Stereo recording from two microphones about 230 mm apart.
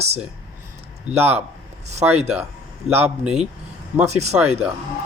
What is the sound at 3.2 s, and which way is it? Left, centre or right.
Speech, centre.